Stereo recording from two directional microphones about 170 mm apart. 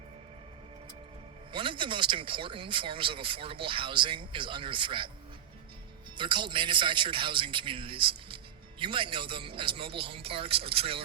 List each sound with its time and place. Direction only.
1.5 s speech: 30° right (ahead or behind)
6.1 s a man's voice: 30° right (ahead or behind)